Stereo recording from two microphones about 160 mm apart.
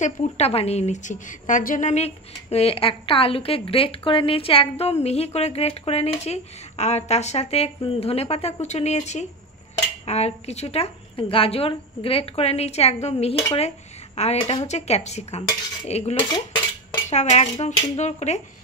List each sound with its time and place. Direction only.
0.0 s a woman's voice: 45° left (ahead or behind)
16.3 s cutlery: 30° left (ahead or behind)
17.1 s speech: 45° left (ahead or behind)